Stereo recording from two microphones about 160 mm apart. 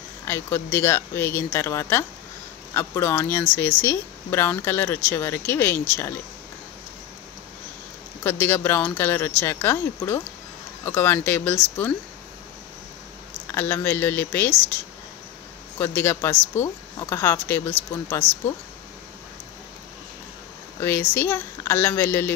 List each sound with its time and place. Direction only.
0.2 s speech: 15° left (ahead or behind)
8.2 s speech: 15° left (ahead or behind)
13.5 s speech: 15° left (ahead or behind)
15.8 s speech: 15° left (ahead or behind)
21.1 s speech: 15° left (ahead or behind)